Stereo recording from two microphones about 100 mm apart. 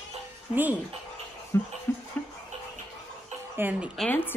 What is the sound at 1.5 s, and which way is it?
Speech, 25° left (ahead or behind).